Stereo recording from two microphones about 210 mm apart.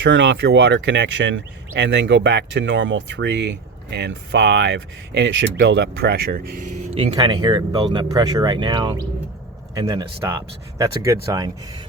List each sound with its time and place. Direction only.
0.0 s speech: 60° right (ahead or behind); by 11.5 s 15° right (ahead or behind)